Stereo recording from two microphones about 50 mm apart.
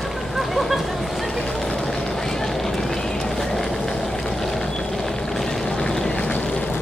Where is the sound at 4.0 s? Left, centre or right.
Centre.